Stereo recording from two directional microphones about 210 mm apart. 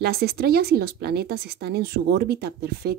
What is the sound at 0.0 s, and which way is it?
Speech, 50° right (ahead or behind).